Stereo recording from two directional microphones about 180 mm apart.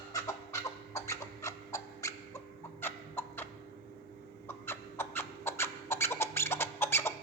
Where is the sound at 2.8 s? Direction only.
10° left (ahead or behind).